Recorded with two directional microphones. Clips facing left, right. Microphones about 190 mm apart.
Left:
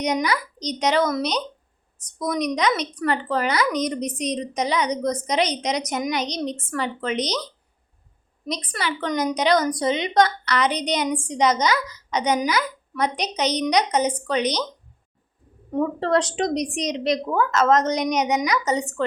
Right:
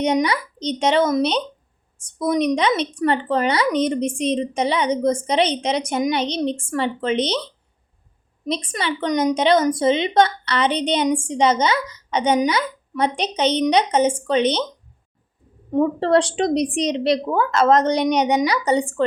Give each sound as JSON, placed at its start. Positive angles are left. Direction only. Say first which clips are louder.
{"t": 0.0, "sound": "a woman's voice", "louder": "right 4 dB", "side_deg": -25}
{"t": 15.7, "sound": "a woman's voice", "louder": "right 4 dB", "side_deg": -25}